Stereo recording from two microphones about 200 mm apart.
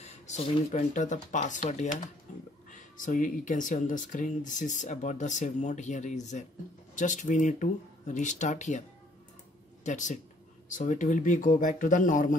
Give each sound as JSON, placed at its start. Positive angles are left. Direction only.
{"t": 0.0, "sound": "speech", "side_deg": 35}
{"t": 9.8, "sound": "speech", "side_deg": 40}